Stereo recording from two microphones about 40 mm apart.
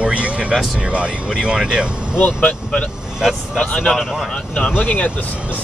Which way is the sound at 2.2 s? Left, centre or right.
Left.